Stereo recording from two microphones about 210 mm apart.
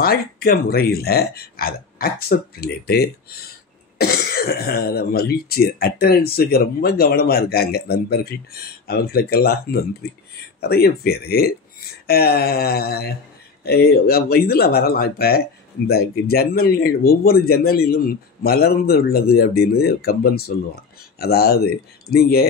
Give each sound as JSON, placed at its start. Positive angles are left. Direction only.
{"t": 0.0, "sound": "speech", "side_deg": 45}